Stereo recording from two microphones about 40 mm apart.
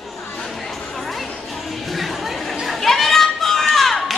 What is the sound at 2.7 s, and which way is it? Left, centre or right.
Children playing, centre.